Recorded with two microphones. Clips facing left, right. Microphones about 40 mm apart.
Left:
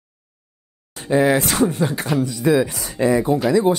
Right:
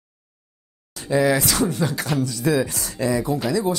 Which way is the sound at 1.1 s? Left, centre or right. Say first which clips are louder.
Left 2 dB; left.